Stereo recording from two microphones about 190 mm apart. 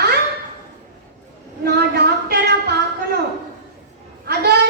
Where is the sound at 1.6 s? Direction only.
60° right (ahead or behind).